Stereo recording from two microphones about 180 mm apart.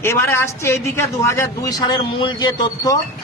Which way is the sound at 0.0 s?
15° left (ahead or behind).